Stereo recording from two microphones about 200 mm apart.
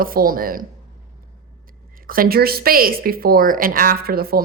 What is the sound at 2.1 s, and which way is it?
Speech, 45° right (ahead or behind).